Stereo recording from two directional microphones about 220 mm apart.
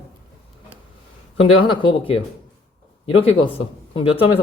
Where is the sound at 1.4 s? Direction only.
20° left (ahead or behind).